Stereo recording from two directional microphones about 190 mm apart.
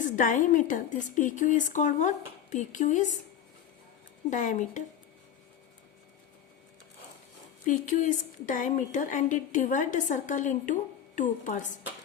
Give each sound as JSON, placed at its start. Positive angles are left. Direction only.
{"t": 0.0, "sound": "a woman's voice", "side_deg": 40}
{"t": 4.3, "sound": "a woman's voice", "side_deg": 40}
{"t": 7.6, "sound": "a woman's voice", "side_deg": 40}